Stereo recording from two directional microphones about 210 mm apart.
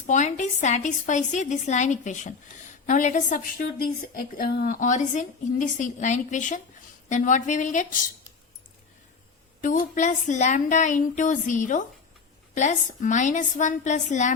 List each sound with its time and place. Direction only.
0.0 s a woman's voice: 35° left (ahead or behind)
9.6 s a woman's voice: 40° left (ahead or behind)